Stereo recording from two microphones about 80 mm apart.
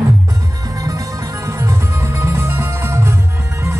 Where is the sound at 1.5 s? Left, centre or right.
Right.